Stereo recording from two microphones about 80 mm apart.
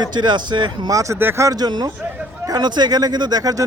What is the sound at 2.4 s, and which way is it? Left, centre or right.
Speech, right.